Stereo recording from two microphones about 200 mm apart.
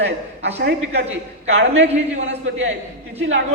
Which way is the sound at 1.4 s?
65° right (ahead or behind).